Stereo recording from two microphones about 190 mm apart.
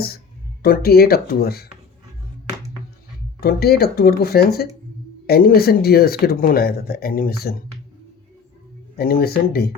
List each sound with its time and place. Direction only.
0.6 s speech: 55° left (ahead or behind)
3.4 s speech: 55° left (ahead or behind)
9.0 s speech: 55° left (ahead or behind)